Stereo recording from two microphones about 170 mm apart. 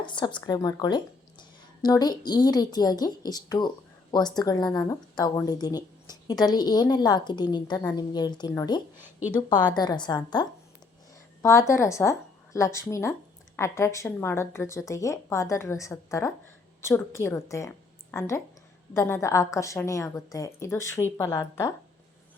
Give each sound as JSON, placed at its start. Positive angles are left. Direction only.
{"t": 0.0, "sound": "a woman's voice", "side_deg": 30}
{"t": 9.0, "sound": "speech", "side_deg": -10}
{"t": 9.5, "sound": "a woman's voice", "side_deg": 25}
{"t": 11.4, "sound": "a woman's voice", "side_deg": 15}